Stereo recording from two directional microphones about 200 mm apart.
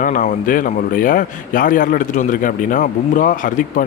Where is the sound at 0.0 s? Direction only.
40° left (ahead or behind).